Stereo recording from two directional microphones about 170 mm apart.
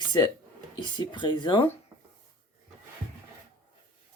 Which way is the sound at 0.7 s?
25° left (ahead or behind).